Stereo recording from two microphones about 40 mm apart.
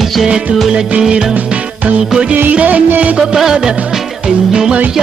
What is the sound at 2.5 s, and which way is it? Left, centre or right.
Music, right.